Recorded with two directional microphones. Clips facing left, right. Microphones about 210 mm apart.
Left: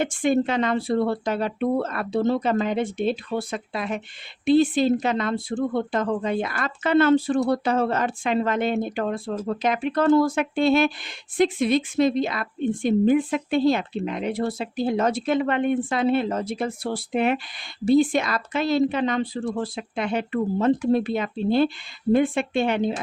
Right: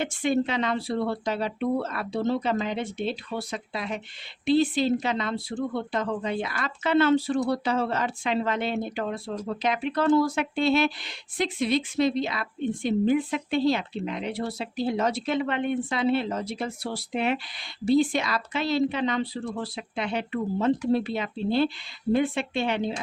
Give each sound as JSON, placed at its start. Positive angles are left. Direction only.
{"t": 0.0, "sound": "a woman's voice", "side_deg": 50}